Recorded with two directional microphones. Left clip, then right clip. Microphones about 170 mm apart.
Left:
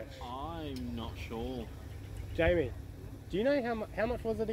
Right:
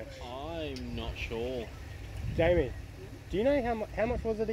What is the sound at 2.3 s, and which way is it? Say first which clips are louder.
Speech: right 2 dB; 35° right (ahead or behind).